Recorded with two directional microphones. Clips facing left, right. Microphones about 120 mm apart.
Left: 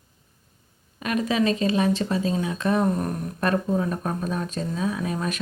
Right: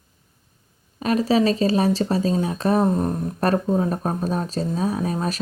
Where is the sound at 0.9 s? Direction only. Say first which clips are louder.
Right 5 dB; 35° right (ahead or behind).